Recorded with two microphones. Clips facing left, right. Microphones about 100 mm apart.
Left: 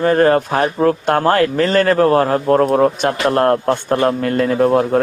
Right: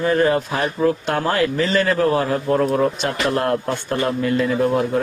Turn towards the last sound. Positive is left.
turn(degrees=45)  # may be behind; listen again after turning